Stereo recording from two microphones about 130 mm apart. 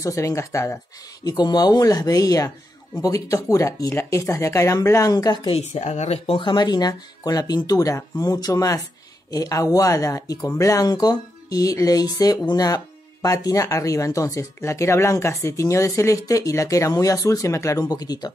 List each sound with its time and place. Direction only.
0.0 s speech: 25° left (ahead or behind)
5.5 s speech: 60° left (ahead or behind); by 18.3 s 30° left (ahead or behind)